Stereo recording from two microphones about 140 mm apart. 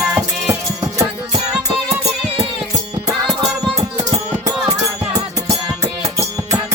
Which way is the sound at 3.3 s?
Centre (ahead or behind).